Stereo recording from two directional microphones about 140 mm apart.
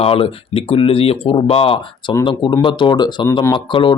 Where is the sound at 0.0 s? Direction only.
40° left (ahead or behind).